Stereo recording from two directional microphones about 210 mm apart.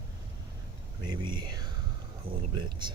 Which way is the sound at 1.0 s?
20° right (ahead or behind).